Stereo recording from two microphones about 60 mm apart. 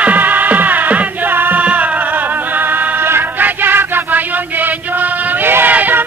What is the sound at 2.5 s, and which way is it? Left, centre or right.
Music, right.